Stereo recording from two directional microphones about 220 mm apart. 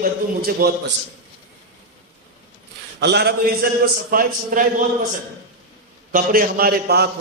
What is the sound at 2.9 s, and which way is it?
A man's voice, 50° right (ahead or behind).